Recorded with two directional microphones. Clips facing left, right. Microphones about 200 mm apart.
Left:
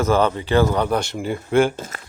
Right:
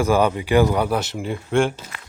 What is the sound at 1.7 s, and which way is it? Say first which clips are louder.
Speech: left 7 dB; 45° left (ahead or behind).